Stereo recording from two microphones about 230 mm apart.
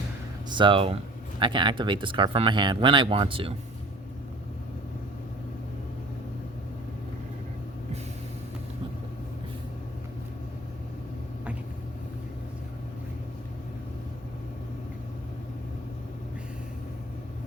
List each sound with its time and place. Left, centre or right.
0.5 s speech: right